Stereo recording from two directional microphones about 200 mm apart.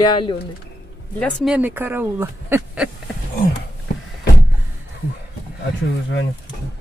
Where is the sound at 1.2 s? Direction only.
5° right (ahead or behind).